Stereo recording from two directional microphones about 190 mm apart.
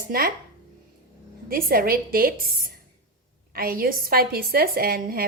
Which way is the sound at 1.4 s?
50° right (ahead or behind).